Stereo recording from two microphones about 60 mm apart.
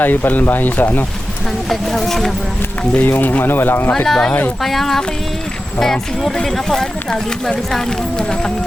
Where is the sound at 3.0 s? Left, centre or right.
Left.